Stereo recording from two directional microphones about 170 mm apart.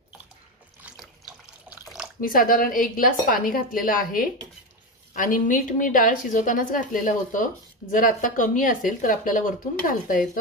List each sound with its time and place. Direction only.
0.8 s water tap: 5° right (ahead or behind)
2.1 s a woman's voice: 55° left (ahead or behind)